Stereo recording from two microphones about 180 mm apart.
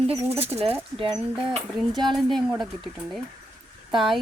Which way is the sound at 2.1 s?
Centre (ahead or behind).